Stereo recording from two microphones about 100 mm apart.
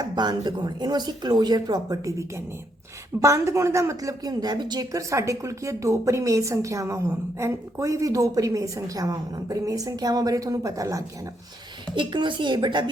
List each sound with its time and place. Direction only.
0.0 s speech: 45° right (ahead or behind)
11.9 s speech: 50° right (ahead or behind)